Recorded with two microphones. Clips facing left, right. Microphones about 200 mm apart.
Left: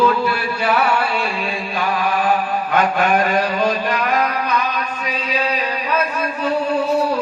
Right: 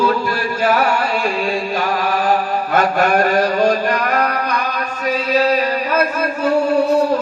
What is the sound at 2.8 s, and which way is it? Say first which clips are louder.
Music: right 2 dB; 40° right (ahead or behind).